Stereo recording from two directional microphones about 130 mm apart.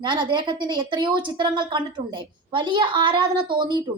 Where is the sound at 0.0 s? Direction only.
35° right (ahead or behind).